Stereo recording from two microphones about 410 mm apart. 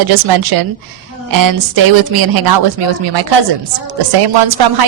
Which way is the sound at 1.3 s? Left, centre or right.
Right.